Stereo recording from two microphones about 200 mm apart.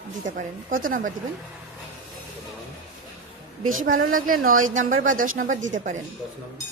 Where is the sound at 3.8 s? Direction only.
45° right (ahead or behind).